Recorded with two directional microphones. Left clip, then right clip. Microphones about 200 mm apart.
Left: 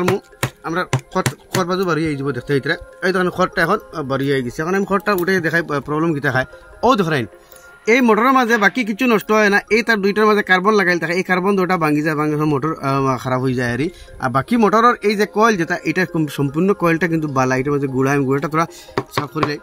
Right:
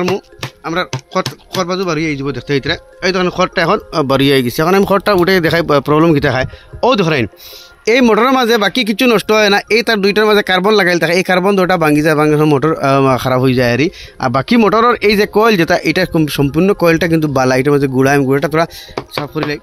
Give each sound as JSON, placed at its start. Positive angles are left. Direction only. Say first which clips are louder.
{"t": 1.1, "sound": "speech", "louder": "right 4 dB", "side_deg": -25}